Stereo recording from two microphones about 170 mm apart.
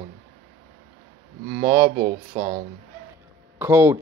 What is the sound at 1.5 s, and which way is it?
Speech, 15° right (ahead or behind).